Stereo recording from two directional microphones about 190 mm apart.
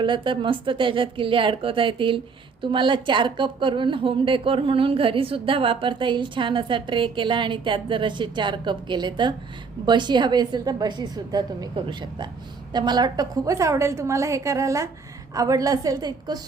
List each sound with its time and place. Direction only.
0.0 s a woman's voice: 25° right (ahead or behind)